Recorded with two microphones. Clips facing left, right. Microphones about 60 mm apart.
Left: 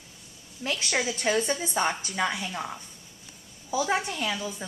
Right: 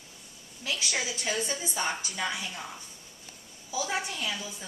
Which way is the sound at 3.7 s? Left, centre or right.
Left.